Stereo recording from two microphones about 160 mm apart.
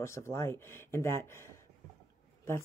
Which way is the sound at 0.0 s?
15° left (ahead or behind).